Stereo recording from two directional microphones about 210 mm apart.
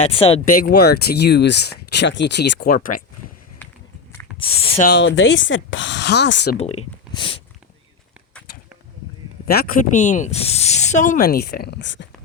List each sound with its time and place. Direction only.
0.0 s speech: 25° left (ahead or behind)
0.4 s speech: 45° left (ahead or behind)
3.6 s walk: 10° left (ahead or behind)
4.4 s speech: 25° left (ahead or behind)
4.8 s speech: 55° left (ahead or behind)
6.6 s speech: 30° left (ahead or behind)
9.5 s speech: 45° left (ahead or behind)